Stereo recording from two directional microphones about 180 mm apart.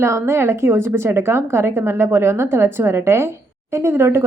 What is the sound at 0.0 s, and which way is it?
A woman's voice, 15° right (ahead or behind).